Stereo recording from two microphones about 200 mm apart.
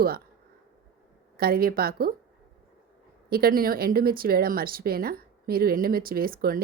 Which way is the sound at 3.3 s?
50° right (ahead or behind).